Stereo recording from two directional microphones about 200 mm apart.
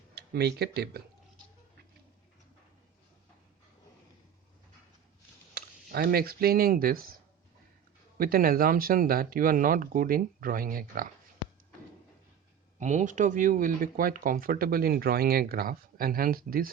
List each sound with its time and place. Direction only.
0.1 s speech: 55° right (ahead or behind)
5.5 s speech: 50° right (ahead or behind)
8.2 s speech: 45° right (ahead or behind)
12.8 s speech: 35° right (ahead or behind)